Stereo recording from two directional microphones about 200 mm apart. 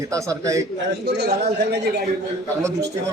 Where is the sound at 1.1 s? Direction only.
55° right (ahead or behind).